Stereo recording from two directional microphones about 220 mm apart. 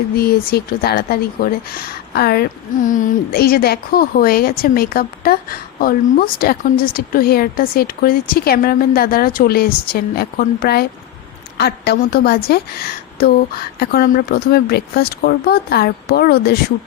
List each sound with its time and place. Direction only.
0.2 s a woman's voice: 45° left (ahead or behind)